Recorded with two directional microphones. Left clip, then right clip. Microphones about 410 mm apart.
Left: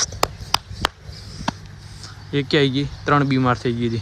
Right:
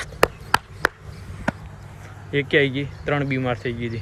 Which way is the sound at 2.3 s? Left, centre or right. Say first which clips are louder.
Even; centre.